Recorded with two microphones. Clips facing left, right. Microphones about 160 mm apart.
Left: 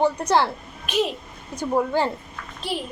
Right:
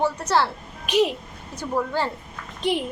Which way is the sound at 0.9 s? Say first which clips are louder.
Right 3 dB; 10° right (ahead or behind).